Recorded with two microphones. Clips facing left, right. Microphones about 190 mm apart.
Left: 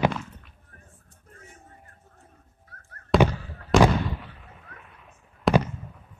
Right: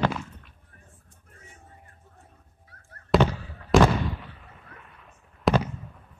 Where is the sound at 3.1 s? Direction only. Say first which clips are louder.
Left 1 dB; centre (ahead or behind).